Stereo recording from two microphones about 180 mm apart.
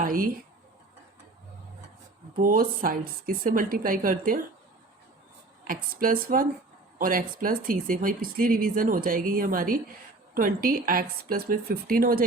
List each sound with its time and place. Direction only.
0.0 s speech: 50° right (ahead or behind)
2.4 s speech: 50° right (ahead or behind)
5.6 s speech: 50° right (ahead or behind)